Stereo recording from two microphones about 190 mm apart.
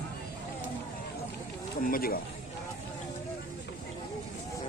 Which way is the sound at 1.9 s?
50° left (ahead or behind).